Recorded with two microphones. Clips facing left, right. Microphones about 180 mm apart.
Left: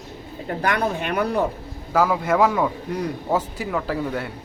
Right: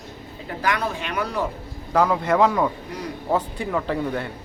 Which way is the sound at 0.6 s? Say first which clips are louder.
Left 2 dB; 50° left (ahead or behind).